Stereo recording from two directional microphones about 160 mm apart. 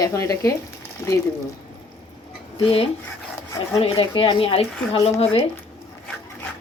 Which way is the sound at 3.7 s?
35° left (ahead or behind).